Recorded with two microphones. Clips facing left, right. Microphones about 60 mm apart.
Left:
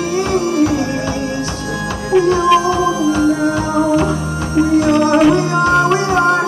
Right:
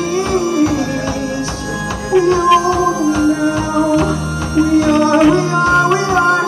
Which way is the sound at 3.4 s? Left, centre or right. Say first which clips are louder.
Even; left.